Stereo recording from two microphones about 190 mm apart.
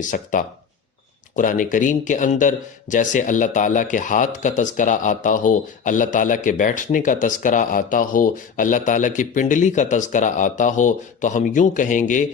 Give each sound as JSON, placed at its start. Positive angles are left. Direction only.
{"t": 0.1, "sound": "speech", "side_deg": 45}